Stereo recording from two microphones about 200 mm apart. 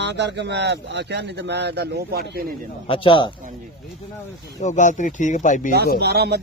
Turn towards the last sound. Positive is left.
turn(degrees=-55)  # may be behind; listen again after turning